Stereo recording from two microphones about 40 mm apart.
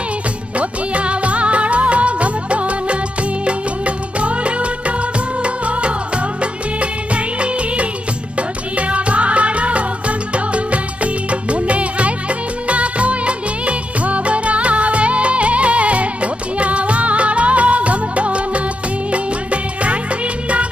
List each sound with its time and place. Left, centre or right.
0.6 s music of bollywood: right
3.4 s music: right